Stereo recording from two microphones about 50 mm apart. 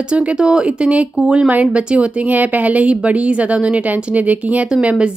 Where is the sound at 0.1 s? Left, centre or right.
Right.